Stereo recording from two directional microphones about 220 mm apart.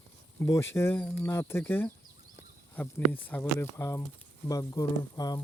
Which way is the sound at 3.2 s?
10° left (ahead or behind).